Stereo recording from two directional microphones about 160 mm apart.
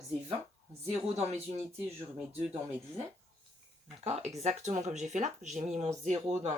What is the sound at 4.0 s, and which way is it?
Speech, 45° right (ahead or behind).